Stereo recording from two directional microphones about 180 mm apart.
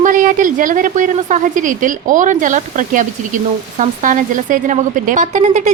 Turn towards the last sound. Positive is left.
turn(degrees=-40)  # may be behind; listen again after turning